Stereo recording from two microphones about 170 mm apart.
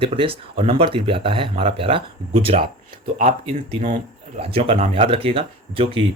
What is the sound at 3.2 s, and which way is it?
Speech, 35° right (ahead or behind).